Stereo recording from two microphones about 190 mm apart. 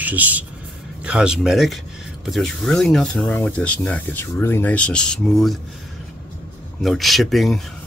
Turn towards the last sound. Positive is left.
turn(degrees=0)  # may be behind; listen again after turning